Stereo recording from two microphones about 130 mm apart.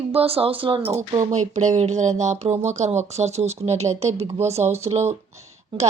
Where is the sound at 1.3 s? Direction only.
65° right (ahead or behind).